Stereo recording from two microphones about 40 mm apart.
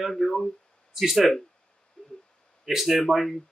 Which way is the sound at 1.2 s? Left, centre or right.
Centre.